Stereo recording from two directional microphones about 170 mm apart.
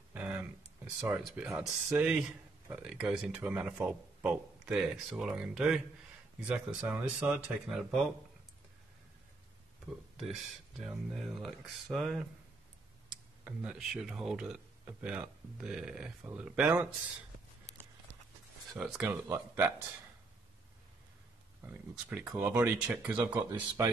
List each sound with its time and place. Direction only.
0.1 s a sound: 10° right (ahead or behind)
1.0 s speech: 5° right (ahead or behind)
10.1 s speech: centre (ahead or behind)
18.8 s speech: centre (ahead or behind)
19.0 s speech: 15° right (ahead or behind)
21.6 s speech: 10° right (ahead or behind)
23.8 s a man's voice: 20° right (ahead or behind)